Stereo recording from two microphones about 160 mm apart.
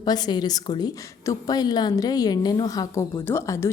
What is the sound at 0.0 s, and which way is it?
A woman's voice, 25° left (ahead or behind).